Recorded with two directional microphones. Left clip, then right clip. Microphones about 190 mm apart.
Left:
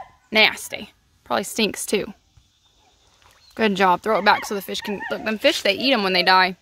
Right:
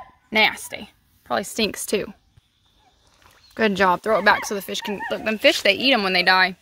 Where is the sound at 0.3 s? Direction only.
15° left (ahead or behind).